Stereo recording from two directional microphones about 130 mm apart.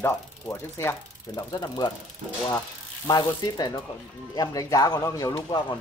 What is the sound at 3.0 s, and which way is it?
Speech, 30° left (ahead or behind).